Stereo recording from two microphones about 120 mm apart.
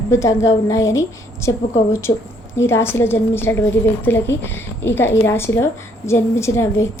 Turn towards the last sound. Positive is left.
turn(degrees=25)  # may be behind; listen again after turning